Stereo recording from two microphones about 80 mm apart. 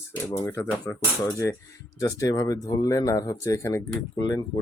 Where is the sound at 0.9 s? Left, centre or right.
Centre.